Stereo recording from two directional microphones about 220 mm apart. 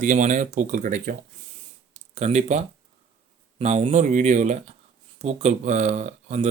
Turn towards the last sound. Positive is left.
turn(degrees=-35)  # may be behind; listen again after turning